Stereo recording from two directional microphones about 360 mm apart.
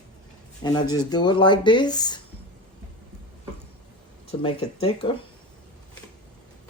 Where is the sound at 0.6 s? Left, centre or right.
Centre.